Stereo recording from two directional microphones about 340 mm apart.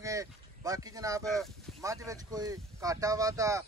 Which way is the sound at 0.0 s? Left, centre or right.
Centre.